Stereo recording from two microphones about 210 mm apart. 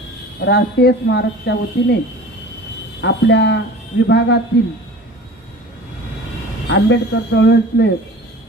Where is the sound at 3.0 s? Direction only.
55° left (ahead or behind).